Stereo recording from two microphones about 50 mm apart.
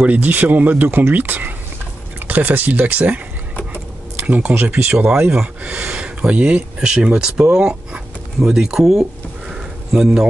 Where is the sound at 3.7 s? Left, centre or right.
Right.